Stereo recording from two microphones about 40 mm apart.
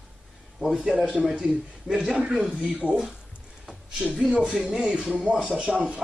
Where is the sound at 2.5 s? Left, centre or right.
Centre.